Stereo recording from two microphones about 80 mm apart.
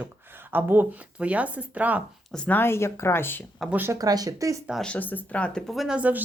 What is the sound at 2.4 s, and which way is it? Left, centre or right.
Speech, left.